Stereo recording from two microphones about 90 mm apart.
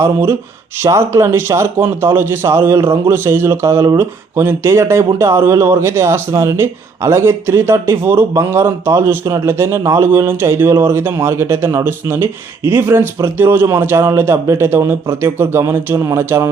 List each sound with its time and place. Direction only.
0.0 s speech: 30° right (ahead or behind)